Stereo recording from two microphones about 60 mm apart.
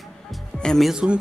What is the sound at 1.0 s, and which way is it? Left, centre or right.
Speech, centre.